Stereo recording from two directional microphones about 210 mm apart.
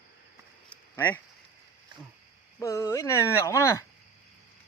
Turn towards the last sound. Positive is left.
turn(degrees=15)  # may be behind; listen again after turning